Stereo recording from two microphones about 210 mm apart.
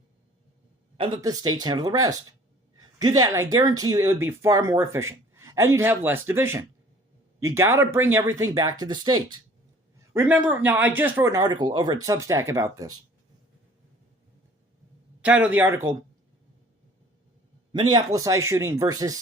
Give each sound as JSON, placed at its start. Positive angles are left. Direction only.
{"t": 0.9, "sound": "speech", "side_deg": -20}
{"t": 10.2, "sound": "speech", "side_deg": -5}
{"t": 15.2, "sound": "speech", "side_deg": -5}
{"t": 17.7, "sound": "speech", "side_deg": -20}